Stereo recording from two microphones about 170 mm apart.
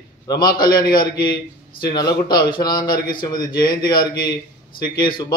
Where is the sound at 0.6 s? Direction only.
60° left (ahead or behind).